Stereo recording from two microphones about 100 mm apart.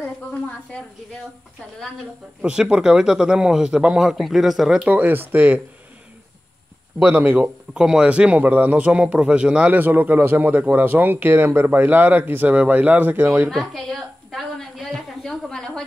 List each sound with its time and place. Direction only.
0.0 s a woman's voice: 15° left (ahead or behind)
2.4 s a man's voice: 10° right (ahead or behind)
4.8 s a man's voice: 15° right (ahead or behind)
7.1 s a man's voice: 15° right (ahead or behind)
7.7 s a man's voice: 5° right (ahead or behind); by 13.5 s 25° right (ahead or behind)
13.5 s a sound: 5° left (ahead or behind)